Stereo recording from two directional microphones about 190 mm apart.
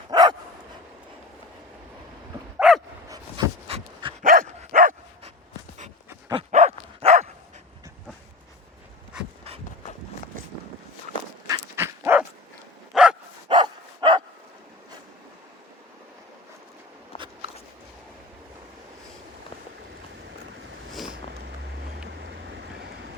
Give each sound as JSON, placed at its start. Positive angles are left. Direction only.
{"t": 0.1, "sound": "dog", "side_deg": -20}
{"t": 2.6, "sound": "dog", "side_deg": 0}
{"t": 3.1, "sound": "dog", "side_deg": -25}
{"t": 4.2, "sound": "dog", "side_deg": -45}
{"t": 6.3, "sound": "dog", "side_deg": -35}
{"t": 11.4, "sound": "dog", "side_deg": -15}
{"t": 13.5, "sound": "dog", "side_deg": -25}
{"t": 21.6, "sound": "boat", "side_deg": -60}